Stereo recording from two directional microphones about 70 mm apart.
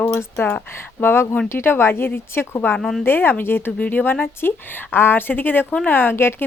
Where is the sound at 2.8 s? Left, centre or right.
Centre.